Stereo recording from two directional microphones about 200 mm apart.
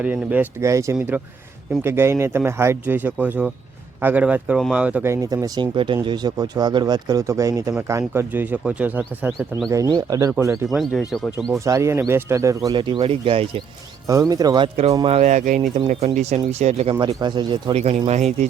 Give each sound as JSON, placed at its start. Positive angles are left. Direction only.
{"t": 0.0, "sound": "speech", "side_deg": -10}
{"t": 10.7, "sound": "speech", "side_deg": 0}
{"t": 11.6, "sound": "speech", "side_deg": -15}
{"t": 17.2, "sound": "speech", "side_deg": -20}